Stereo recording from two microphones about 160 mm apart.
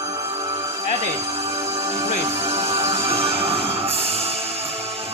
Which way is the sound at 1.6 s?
20° right (ahead or behind).